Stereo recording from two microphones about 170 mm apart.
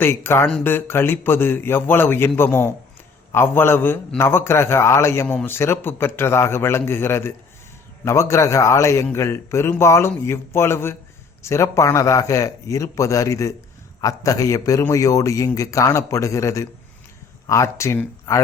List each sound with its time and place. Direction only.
0.0 s a man's voice: 15° left (ahead or behind)